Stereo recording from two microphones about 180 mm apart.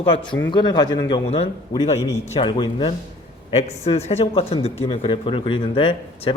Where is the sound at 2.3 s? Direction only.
25° left (ahead or behind).